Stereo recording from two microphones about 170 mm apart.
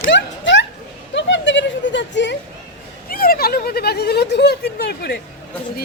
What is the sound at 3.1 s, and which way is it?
Speech, 60° left (ahead or behind).